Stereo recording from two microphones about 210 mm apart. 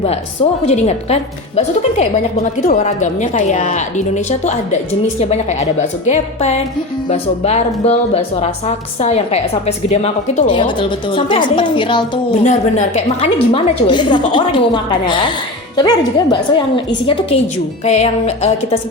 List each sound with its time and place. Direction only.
0.6 s a woman's voice: 30° left (ahead or behind)
12.5 s a woman's voice: 35° left (ahead or behind)